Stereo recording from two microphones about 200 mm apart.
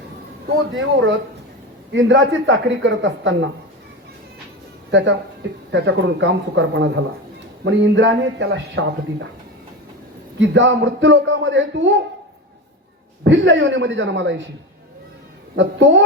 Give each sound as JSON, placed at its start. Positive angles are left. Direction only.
{"t": 0.7, "sound": "a man's voice", "side_deg": -75}
{"t": 4.9, "sound": "speech", "side_deg": -65}
{"t": 10.4, "sound": "a man's voice", "side_deg": -65}
{"t": 13.2, "sound": "speech", "side_deg": -65}
{"t": 15.5, "sound": "a man's voice", "side_deg": -65}